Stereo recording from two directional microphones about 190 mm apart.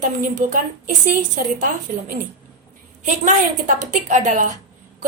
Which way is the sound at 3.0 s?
40° right (ahead or behind).